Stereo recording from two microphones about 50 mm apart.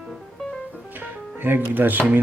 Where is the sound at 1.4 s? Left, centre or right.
Right.